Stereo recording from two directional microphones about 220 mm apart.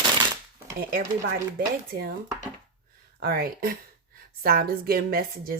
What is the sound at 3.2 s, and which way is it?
A woman's voice, 45° right (ahead or behind).